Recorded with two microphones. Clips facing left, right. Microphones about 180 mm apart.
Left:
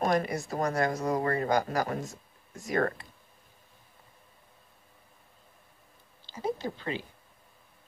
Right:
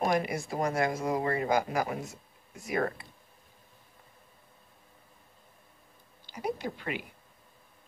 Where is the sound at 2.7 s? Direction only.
5° right (ahead or behind).